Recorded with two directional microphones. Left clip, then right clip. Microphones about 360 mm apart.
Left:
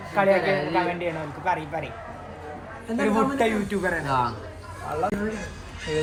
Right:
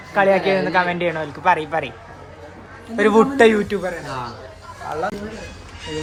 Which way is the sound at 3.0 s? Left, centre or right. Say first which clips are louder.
Right 9 dB; centre.